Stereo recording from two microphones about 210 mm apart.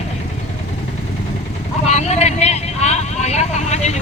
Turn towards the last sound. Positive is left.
turn(degrees=30)  # may be behind; listen again after turning